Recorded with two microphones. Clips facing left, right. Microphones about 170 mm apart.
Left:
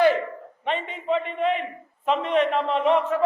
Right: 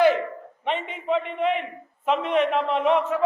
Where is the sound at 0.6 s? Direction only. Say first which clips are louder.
Even; 10° right (ahead or behind).